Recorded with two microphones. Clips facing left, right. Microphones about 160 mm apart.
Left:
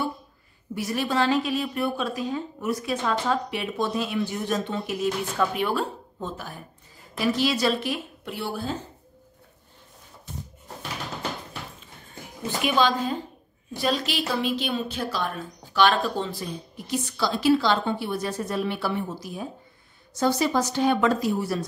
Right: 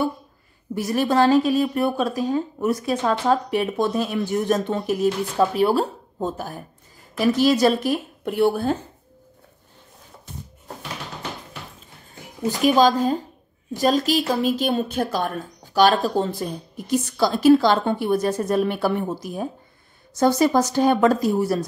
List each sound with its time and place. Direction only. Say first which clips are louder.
0.7 s a woman's voice: right 6 dB; 45° right (ahead or behind)
12.4 s a woman's voice: right 6 dB; 40° right (ahead or behind)